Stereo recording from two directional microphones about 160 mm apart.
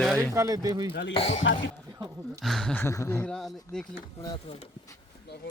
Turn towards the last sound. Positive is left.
turn(degrees=25)  # may be behind; listen again after turning